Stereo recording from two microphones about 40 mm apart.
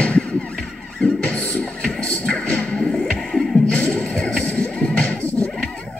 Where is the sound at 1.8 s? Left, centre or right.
Left.